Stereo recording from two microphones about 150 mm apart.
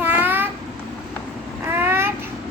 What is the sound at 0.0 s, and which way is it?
Babbling, 15° right (ahead or behind).